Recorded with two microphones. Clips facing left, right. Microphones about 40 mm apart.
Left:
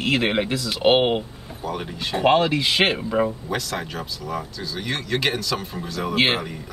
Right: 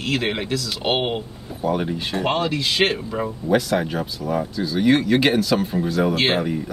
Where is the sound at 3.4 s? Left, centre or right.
Centre.